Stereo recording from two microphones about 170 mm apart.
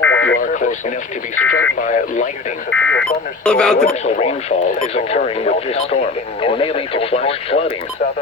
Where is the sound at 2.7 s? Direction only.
5° left (ahead or behind).